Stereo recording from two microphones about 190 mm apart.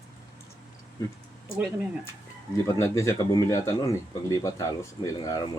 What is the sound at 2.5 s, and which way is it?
Speech, 15° left (ahead or behind).